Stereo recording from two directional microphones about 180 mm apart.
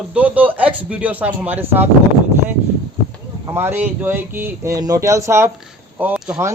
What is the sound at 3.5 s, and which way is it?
Speech, 10° right (ahead or behind).